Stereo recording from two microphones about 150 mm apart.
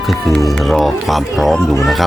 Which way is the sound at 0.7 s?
Centre (ahead or behind).